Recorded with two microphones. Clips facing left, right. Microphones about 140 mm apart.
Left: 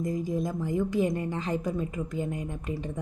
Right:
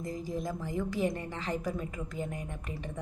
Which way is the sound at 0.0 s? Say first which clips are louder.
Left 6 dB; 15° left (ahead or behind).